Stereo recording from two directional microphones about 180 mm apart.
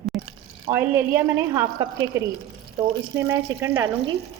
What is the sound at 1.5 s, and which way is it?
A woman's voice, 20° right (ahead or behind).